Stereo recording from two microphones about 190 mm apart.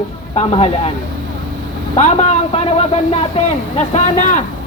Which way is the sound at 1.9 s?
35° left (ahead or behind).